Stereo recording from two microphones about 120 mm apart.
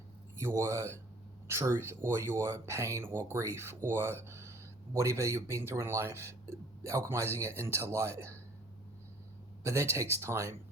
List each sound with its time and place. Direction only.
0.3 s speech: 25° right (ahead or behind)
9.6 s speech: 25° right (ahead or behind)